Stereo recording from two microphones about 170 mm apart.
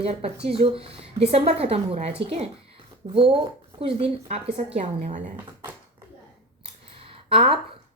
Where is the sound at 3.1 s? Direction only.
35° right (ahead or behind).